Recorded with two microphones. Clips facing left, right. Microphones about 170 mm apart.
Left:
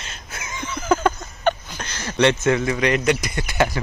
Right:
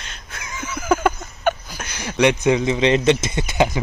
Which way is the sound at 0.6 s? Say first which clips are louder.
Right 1 dB; 10° right (ahead or behind).